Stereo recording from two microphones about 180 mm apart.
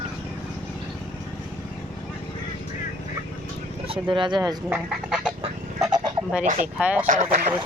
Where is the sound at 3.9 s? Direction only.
25° right (ahead or behind).